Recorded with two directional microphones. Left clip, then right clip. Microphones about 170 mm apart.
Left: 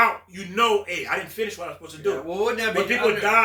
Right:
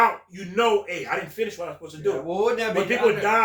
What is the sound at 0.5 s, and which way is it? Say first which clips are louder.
A man's voice: left 1 dB; 20° left (ahead or behind).